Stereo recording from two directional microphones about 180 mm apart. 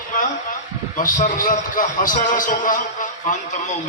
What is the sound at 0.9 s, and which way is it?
A man's voice, 50° left (ahead or behind).